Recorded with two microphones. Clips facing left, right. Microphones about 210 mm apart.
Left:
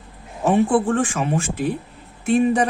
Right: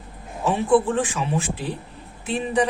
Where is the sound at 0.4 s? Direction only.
50° left (ahead or behind).